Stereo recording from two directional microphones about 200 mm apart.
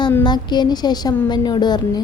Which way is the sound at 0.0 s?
20° left (ahead or behind).